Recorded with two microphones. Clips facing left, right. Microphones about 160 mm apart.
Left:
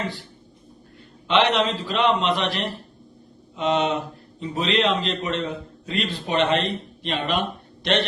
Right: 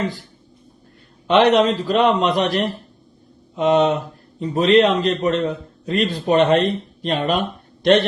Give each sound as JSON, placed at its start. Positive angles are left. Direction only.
{"t": 1.3, "sound": "a man's voice", "side_deg": -45}